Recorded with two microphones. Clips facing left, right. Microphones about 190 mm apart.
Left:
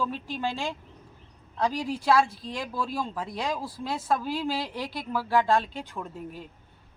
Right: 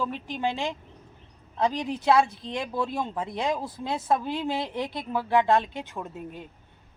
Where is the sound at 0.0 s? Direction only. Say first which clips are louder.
Right 1 dB; 15° right (ahead or behind).